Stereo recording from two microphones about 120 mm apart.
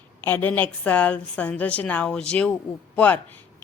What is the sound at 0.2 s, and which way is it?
A woman's voice, 15° left (ahead or behind).